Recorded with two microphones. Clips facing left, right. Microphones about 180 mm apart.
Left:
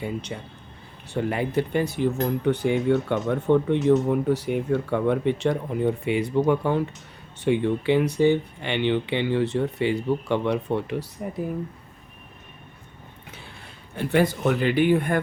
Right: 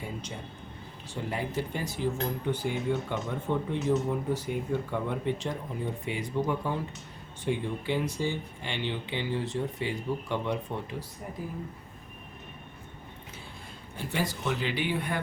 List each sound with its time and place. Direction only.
0.0 s speech: 70° left (ahead or behind)
2.5 s speech: 70° left (ahead or behind)
13.9 s speech: 65° left (ahead or behind)